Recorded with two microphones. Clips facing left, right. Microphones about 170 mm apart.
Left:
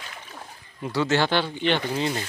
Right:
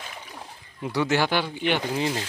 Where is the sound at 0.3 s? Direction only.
10° right (ahead or behind).